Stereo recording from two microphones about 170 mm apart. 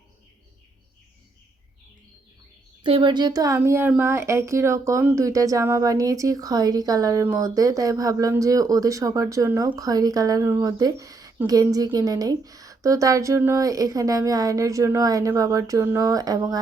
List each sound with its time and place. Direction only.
2.8 s speech: 30° right (ahead or behind)